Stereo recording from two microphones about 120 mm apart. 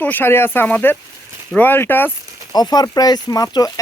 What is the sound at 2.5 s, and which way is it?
Speech, 35° left (ahead or behind).